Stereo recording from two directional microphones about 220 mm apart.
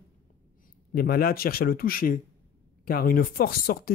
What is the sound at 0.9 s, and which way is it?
Speech, 45° left (ahead or behind).